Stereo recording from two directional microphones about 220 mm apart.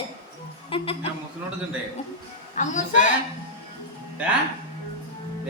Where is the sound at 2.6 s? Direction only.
35° left (ahead or behind).